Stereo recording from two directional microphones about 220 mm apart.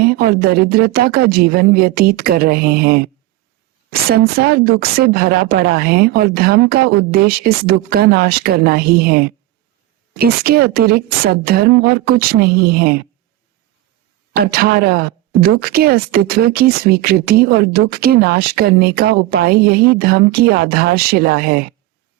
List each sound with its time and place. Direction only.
0.0 s a woman's voice: 45° right (ahead or behind)
14.3 s a woman's voice: 45° right (ahead or behind)